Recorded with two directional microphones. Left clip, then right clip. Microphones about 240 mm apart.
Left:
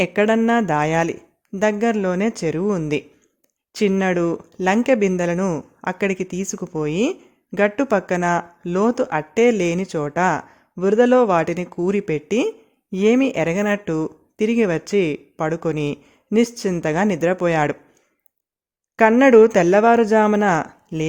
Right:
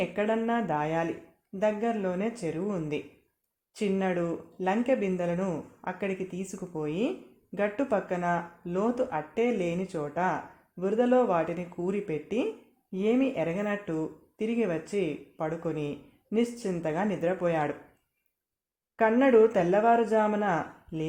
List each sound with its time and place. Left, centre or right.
0.0 s speech: left
18.9 s speech: left